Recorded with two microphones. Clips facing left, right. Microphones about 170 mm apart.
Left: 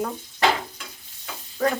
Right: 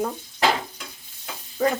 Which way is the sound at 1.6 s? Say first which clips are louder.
Right 1 dB; 15° right (ahead or behind).